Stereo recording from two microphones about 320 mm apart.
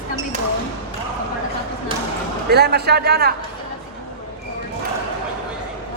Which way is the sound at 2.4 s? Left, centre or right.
Right.